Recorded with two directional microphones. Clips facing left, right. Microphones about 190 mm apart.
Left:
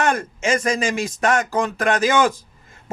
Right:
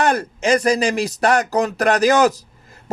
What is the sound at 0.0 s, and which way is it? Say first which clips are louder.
A man's voice: right 2 dB; 35° right (ahead or behind).